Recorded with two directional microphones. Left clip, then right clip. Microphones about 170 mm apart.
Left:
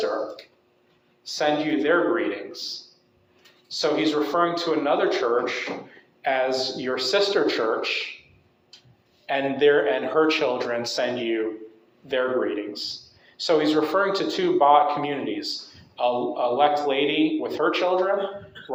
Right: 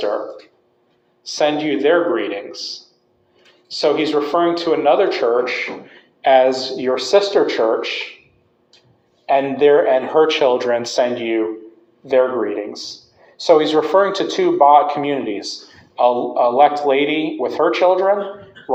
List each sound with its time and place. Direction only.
1.2 s a man's voice: 40° right (ahead or behind)
3.7 s a man's voice: 40° right (ahead or behind)
9.2 s a man's voice: 30° right (ahead or behind)